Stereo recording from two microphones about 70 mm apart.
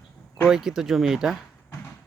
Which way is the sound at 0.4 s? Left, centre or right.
Centre.